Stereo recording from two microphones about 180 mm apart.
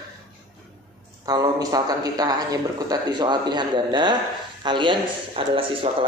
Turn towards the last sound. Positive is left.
turn(degrees=-30)  # may be behind; listen again after turning